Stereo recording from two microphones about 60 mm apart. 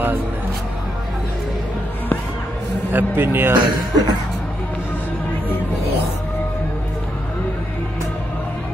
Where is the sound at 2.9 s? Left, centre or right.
Right.